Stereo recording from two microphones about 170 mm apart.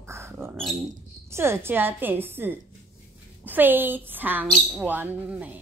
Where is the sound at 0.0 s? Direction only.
15° right (ahead or behind).